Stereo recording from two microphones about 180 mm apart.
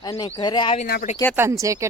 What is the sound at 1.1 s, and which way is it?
Speech, 40° left (ahead or behind).